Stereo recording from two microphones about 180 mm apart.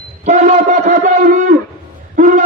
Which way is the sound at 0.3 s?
45° right (ahead or behind).